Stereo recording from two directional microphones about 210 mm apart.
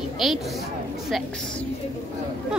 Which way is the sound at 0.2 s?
Centre (ahead or behind).